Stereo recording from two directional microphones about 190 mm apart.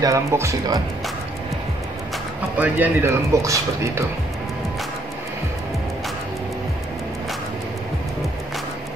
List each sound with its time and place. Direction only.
0.0 s a man's voice: 15° right (ahead or behind)
2.5 s a man's voice: 10° right (ahead or behind)